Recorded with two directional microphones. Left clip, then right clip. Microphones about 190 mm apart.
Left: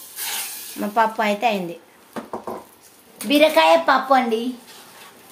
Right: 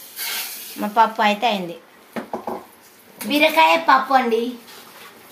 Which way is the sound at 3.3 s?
40° left (ahead or behind).